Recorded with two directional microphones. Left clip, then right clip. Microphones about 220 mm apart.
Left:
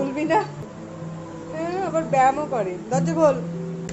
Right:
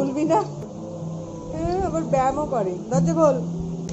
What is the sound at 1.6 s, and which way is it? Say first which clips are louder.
A woman's voice: even; centre (ahead or behind).